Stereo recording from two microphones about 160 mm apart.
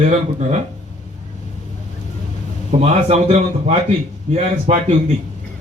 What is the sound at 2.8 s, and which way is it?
A man's voice, 40° right (ahead or behind).